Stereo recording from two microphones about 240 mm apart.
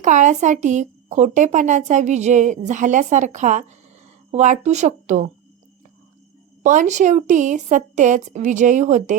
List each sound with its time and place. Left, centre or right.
0.0 s speech: right
6.6 s speech: right